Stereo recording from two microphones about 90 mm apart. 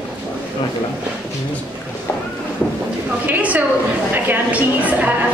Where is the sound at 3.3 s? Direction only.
20° right (ahead or behind).